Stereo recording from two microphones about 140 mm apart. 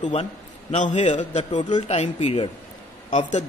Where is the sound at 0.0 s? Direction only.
50° left (ahead or behind).